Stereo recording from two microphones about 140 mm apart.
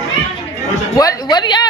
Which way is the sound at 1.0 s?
25° left (ahead or behind).